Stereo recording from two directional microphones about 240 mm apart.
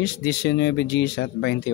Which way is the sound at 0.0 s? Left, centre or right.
Left.